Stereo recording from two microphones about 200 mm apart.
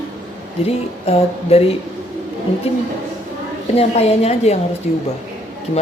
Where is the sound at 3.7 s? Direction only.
30° left (ahead or behind).